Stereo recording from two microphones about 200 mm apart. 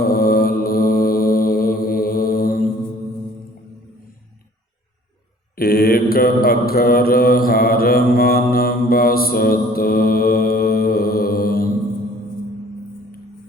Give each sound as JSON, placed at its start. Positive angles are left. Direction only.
{"t": 0.0, "sound": "mantra", "side_deg": 50}
{"t": 5.5, "sound": "mantra", "side_deg": 50}